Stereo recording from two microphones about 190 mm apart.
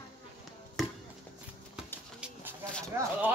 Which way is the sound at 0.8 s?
Centre (ahead or behind).